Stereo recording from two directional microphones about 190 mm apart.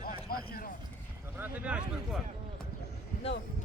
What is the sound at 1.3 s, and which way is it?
Speech, 10° right (ahead or behind).